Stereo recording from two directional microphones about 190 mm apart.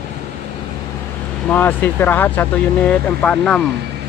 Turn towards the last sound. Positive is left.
turn(degrees=5)  # may be behind; listen again after turning